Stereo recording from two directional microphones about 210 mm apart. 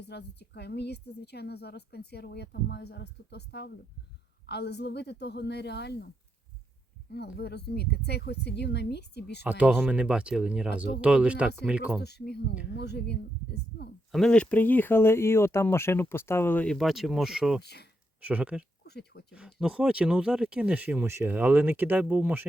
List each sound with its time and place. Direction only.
0.0 s a woman's voice: 55° left (ahead or behind)
7.1 s a woman's voice: 50° left (ahead or behind)
9.4 s speech: 5° right (ahead or behind)
12.0 s a woman's voice: 50° left (ahead or behind)
14.1 s speech: 5° left (ahead or behind)
17.6 s a woman's voice: 50° left (ahead or behind)
18.2 s speech: 10° right (ahead or behind)
18.9 s speech: 50° left (ahead or behind)
19.3 s speech: 5° right (ahead or behind)